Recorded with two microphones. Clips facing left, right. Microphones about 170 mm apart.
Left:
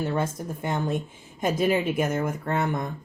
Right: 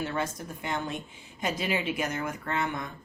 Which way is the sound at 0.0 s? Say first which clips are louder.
Left 5 dB; 50° left (ahead or behind).